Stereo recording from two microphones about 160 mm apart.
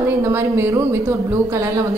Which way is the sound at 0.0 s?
15° right (ahead or behind).